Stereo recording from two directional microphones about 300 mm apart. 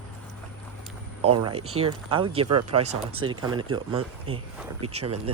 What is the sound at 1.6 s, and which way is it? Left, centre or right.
Speech, right.